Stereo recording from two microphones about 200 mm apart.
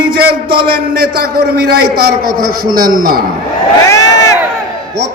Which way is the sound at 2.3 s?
50° right (ahead or behind).